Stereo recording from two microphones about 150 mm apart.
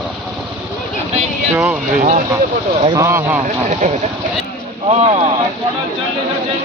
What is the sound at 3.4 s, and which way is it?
Speech, 50° right (ahead or behind).